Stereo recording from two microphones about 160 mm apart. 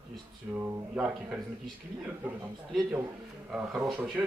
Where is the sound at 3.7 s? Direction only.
Centre (ahead or behind).